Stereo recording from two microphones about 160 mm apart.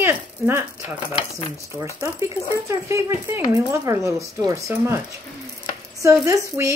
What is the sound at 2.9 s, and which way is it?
Speech, 15° right (ahead or behind).